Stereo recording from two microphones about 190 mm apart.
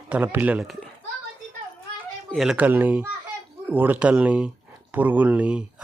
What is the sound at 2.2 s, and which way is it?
Speech, centre (ahead or behind).